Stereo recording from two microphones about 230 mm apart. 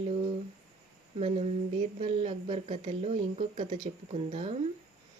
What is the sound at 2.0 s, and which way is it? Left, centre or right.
Speech, right.